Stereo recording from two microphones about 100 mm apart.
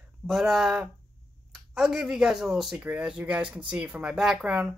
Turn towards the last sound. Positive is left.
turn(degrees=-10)  # may be behind; listen again after turning